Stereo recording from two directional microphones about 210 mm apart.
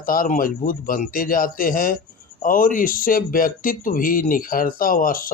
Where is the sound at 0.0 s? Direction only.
40° left (ahead or behind).